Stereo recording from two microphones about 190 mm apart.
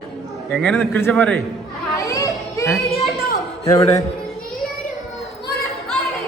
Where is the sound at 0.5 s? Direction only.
5° left (ahead or behind).